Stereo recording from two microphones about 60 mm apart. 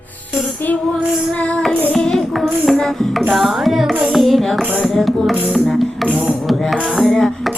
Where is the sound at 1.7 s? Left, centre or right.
Left.